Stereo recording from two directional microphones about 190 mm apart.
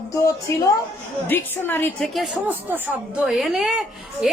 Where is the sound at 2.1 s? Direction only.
Centre (ahead or behind).